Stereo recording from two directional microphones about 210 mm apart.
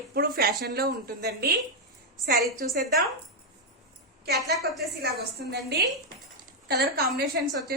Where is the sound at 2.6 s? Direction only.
45° right (ahead or behind).